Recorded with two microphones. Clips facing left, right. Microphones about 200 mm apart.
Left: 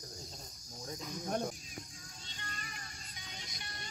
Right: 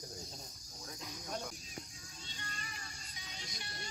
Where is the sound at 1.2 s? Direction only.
50° left (ahead or behind).